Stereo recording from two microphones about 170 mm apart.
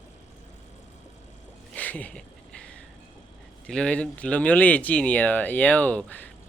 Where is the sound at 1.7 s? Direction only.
10° left (ahead or behind).